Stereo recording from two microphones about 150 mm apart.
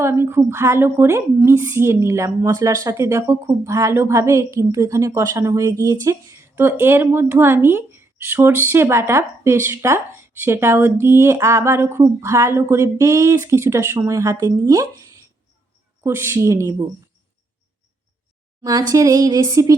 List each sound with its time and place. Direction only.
0.0 s a woman's voice: 15° right (ahead or behind)
18.6 s speech: 25° right (ahead or behind)